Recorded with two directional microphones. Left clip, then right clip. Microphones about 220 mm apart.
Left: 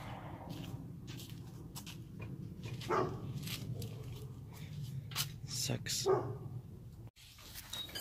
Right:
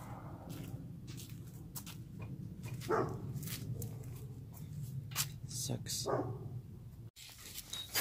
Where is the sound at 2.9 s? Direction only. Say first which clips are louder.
Even; 35° right (ahead or behind).